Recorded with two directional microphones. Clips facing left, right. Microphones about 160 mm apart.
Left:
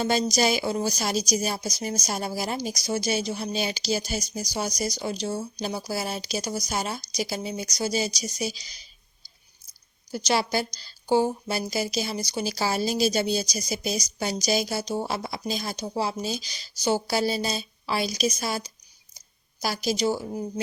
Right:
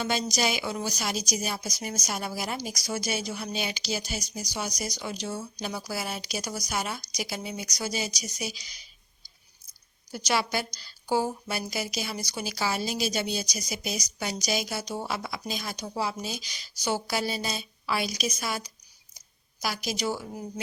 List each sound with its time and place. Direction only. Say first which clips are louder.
0.0 s speech: left 5 dB; 40° left (ahead or behind)
10.1 s speech: left 3 dB; 30° left (ahead or behind)